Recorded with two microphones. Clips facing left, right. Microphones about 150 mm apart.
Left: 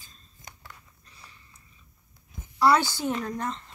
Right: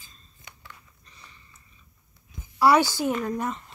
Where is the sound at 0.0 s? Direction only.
40° left (ahead or behind).